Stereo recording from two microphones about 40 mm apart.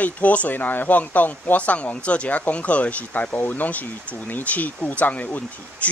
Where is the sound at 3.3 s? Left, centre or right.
Left.